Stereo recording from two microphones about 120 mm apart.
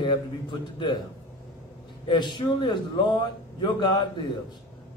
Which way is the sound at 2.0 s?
40° left (ahead or behind).